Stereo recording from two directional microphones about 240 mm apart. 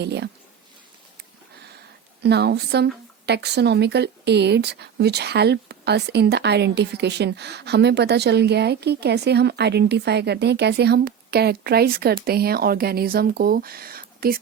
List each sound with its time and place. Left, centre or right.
0.0 s speech: right
2.2 s speech: right